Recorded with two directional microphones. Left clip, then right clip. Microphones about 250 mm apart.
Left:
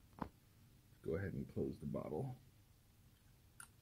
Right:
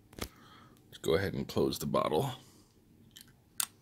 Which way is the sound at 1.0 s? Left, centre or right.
Centre.